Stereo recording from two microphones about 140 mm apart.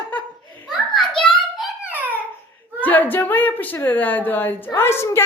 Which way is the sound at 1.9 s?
10° right (ahead or behind).